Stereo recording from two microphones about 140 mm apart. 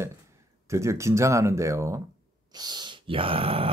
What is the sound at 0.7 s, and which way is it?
Speech, 20° right (ahead or behind).